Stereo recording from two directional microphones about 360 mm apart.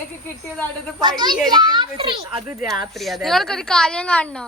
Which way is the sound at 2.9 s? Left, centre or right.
Centre.